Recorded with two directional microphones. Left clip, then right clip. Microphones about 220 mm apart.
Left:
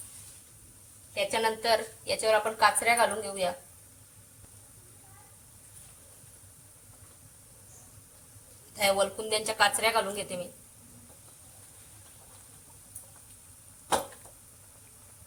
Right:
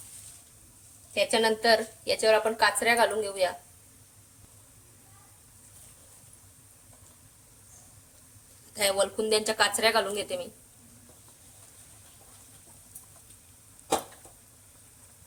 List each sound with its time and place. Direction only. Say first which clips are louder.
1.1 s a woman's voice: right 4 dB; 40° right (ahead or behind)
8.8 s a woman's voice: even; 35° right (ahead or behind)